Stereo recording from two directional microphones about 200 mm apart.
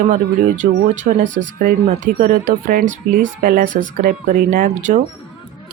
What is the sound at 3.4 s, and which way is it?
Speech, 45° right (ahead or behind).